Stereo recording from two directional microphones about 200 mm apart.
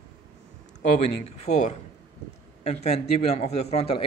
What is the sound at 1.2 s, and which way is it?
A man's voice, 30° left (ahead or behind).